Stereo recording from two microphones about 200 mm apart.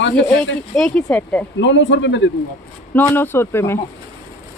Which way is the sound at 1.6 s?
65° left (ahead or behind).